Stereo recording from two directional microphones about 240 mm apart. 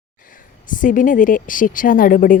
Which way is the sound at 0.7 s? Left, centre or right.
Left.